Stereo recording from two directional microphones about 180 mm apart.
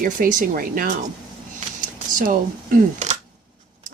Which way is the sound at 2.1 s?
50° right (ahead or behind).